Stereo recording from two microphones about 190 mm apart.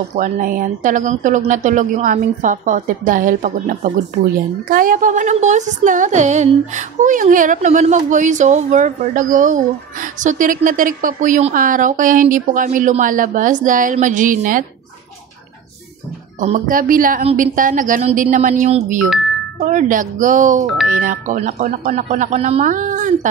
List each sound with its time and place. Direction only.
0.1 s speech: 45° right (ahead or behind)
16.3 s speech: 45° right (ahead or behind)
20.6 s speech: centre (ahead or behind)
20.9 s speech: 45° right (ahead or behind)